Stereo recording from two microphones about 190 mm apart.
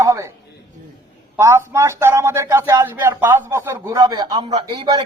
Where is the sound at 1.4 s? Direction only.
15° right (ahead or behind).